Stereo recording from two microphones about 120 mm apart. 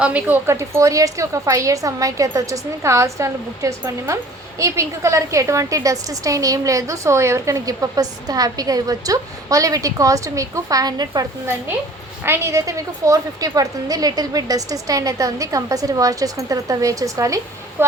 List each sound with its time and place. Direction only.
0.0 s a woman's voice: 10° right (ahead or behind); by 11.3 s 35° right (ahead or behind)
12.2 s a woman's voice: 20° right (ahead or behind)